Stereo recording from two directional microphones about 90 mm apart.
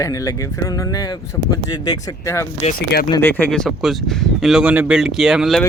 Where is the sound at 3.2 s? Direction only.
20° left (ahead or behind).